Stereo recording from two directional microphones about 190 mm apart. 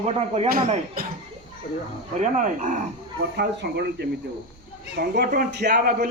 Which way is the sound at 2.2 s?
40° right (ahead or behind).